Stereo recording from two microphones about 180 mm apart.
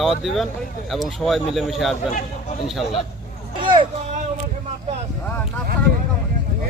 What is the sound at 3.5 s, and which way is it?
Speech, 25° right (ahead or behind).